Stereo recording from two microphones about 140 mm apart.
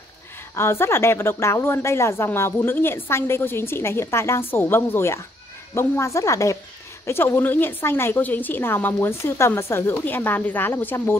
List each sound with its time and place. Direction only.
0.6 s a woman's voice: 20° left (ahead or behind)